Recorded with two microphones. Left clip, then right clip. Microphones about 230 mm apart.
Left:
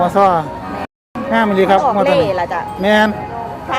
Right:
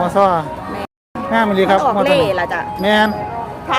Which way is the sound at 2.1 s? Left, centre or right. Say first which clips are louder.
Even; right.